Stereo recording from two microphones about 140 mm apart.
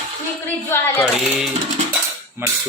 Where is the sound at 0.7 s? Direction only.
15° left (ahead or behind).